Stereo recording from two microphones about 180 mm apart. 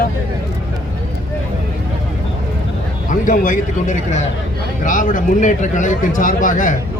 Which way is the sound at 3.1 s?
45° left (ahead or behind).